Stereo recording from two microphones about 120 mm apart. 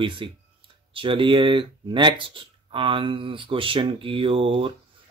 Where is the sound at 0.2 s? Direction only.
45° right (ahead or behind).